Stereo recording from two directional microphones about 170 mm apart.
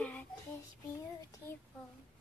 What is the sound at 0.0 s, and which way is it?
Child singing, 10° left (ahead or behind).